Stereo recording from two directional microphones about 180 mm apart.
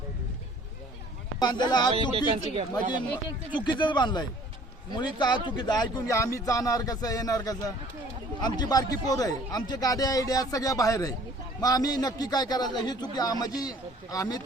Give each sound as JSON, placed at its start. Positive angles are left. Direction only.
{"t": 1.4, "sound": "a man's voice", "side_deg": 25}
{"t": 2.1, "sound": "speech", "side_deg": -30}
{"t": 3.6, "sound": "a man's voice", "side_deg": 25}